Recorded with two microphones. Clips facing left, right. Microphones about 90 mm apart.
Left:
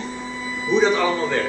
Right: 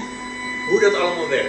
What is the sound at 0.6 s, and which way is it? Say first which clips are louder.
Speech: right 2 dB; 15° left (ahead or behind).